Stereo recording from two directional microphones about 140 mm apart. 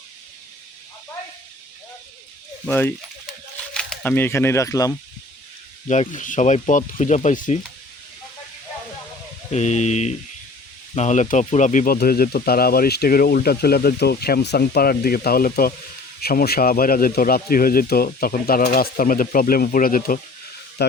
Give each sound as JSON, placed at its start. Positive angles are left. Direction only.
{"t": 2.6, "sound": "speech", "side_deg": 15}
{"t": 5.9, "sound": "speech", "side_deg": 60}
{"t": 9.5, "sound": "speech", "side_deg": 55}